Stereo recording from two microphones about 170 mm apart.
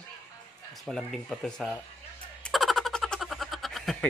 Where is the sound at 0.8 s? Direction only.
Centre (ahead or behind).